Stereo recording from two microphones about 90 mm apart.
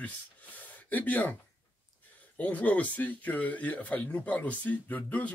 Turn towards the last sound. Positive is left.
turn(degrees=15)  # may be behind; listen again after turning